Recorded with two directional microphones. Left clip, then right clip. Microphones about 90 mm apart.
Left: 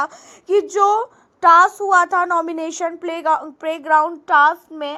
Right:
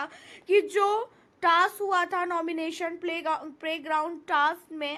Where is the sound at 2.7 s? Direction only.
45° left (ahead or behind); by 5.0 s 30° left (ahead or behind).